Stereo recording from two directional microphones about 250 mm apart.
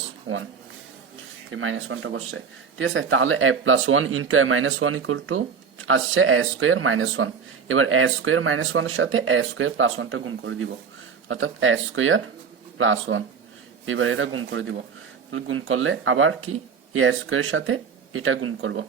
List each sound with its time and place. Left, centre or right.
1.5 s speech: right